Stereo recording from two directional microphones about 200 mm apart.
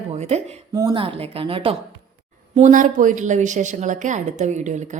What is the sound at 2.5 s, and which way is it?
A woman's voice, 40° right (ahead or behind).